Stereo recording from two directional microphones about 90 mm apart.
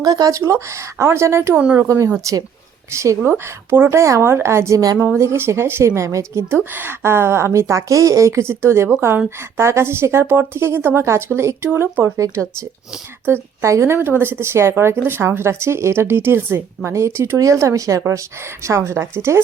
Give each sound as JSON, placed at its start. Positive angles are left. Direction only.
{"t": 0.0, "sound": "a woman's voice", "side_deg": -45}
{"t": 1.6, "sound": "speech", "side_deg": -15}
{"t": 2.3, "sound": "a woman's voice", "side_deg": -35}
{"t": 12.1, "sound": "a woman's voice", "side_deg": -35}